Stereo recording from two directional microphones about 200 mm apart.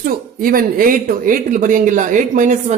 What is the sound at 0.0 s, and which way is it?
A man's voice, 45° right (ahead or behind).